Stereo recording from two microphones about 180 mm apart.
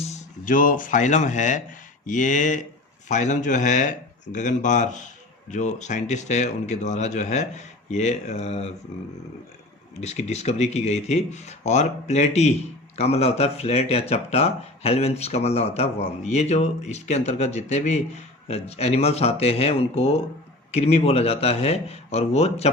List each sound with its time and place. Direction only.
0.1 s speech: 45° left (ahead or behind)
10.0 s speech: 35° left (ahead or behind)